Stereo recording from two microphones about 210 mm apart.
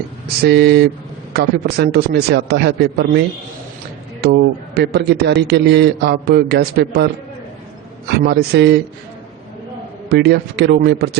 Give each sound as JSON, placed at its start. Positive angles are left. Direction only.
{"t": 0.4, "sound": "a man's voice", "side_deg": -50}
{"t": 10.1, "sound": "a man's voice", "side_deg": -50}